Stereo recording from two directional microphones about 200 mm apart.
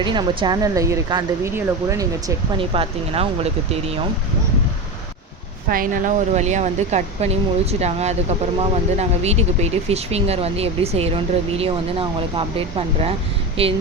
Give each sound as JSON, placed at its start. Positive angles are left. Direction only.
{"t": 0.0, "sound": "speech", "side_deg": -25}
{"t": 5.6, "sound": "speech", "side_deg": -45}